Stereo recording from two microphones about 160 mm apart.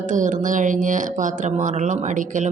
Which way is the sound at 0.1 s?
50° right (ahead or behind).